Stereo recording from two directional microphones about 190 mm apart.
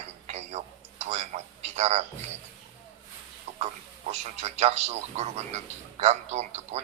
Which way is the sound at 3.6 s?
35° right (ahead or behind).